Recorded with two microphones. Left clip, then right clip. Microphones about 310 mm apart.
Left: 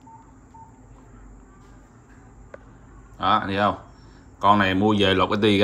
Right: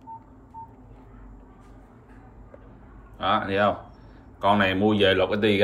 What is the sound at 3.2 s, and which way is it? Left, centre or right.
Speech, centre.